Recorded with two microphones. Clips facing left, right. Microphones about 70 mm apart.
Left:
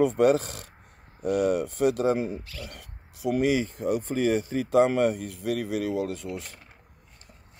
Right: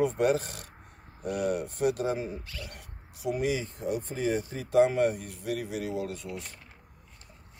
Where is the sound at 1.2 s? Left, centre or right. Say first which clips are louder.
Left 6 dB; left.